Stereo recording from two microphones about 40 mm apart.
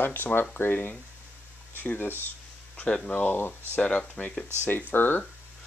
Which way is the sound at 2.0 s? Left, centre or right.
Left.